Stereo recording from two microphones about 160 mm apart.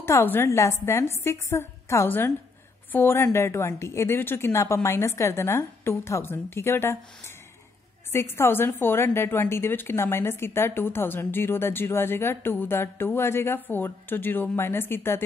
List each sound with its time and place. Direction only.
0.0 s a woman's voice: 15° left (ahead or behind)
8.1 s a woman's voice: 15° left (ahead or behind)